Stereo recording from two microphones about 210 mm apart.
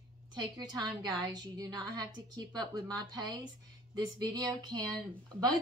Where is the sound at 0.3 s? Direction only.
20° right (ahead or behind).